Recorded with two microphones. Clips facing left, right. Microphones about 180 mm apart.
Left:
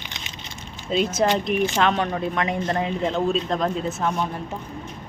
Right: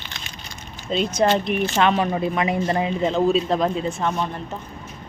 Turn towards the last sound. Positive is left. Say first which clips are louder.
# right 1 dB
turn(degrees=5)  # may be behind; listen again after turning